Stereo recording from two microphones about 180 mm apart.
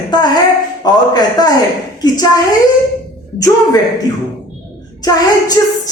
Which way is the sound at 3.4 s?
20° left (ahead or behind).